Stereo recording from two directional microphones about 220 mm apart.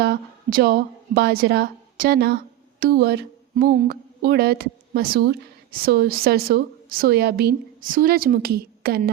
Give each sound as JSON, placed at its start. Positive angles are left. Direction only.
{"t": 0.0, "sound": "a woman's voice", "side_deg": -45}